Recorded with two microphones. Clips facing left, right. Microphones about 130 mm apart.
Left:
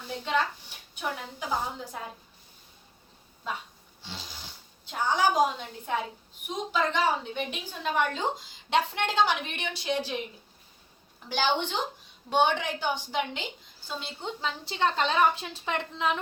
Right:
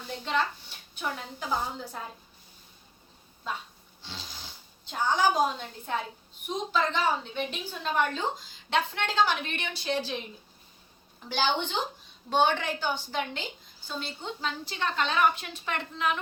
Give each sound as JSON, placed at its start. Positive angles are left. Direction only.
{"t": 0.1, "sound": "a woman's voice", "side_deg": 10}
{"t": 4.0, "sound": "a sound", "side_deg": 10}
{"t": 4.9, "sound": "a woman's voice", "side_deg": 5}
{"t": 11.3, "sound": "a woman's voice", "side_deg": 10}